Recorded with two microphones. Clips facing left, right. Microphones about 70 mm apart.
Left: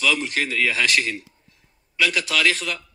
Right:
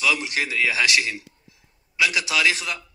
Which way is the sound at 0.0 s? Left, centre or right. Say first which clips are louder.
Left 1 dB; centre.